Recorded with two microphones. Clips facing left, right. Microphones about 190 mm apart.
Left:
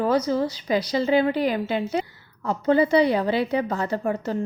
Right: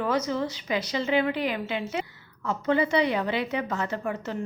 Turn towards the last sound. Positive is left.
turn(degrees=35)  # may be behind; listen again after turning